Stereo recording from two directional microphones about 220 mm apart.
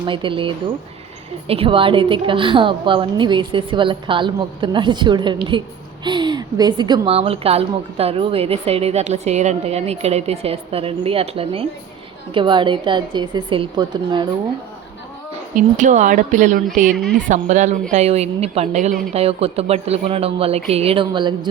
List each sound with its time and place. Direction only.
0.0 s a woman's voice: 20° right (ahead or behind)
15.5 s a woman's voice: 35° right (ahead or behind)